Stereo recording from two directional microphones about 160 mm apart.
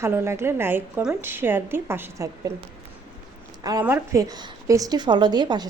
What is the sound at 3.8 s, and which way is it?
A woman's voice, 15° right (ahead or behind).